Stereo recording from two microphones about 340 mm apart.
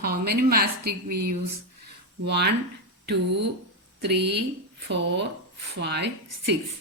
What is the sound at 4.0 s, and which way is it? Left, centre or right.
Speech, right.